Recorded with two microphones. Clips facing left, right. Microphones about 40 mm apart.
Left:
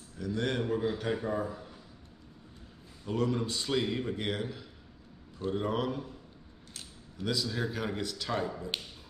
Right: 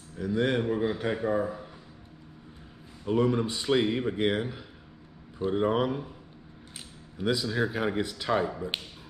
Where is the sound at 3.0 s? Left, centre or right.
Right.